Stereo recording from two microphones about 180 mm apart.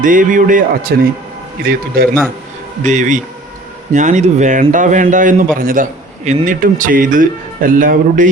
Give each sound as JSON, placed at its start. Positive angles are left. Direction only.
{"t": 0.0, "sound": "a man's voice", "side_deg": -45}
{"t": 2.8, "sound": "a man's voice", "side_deg": -45}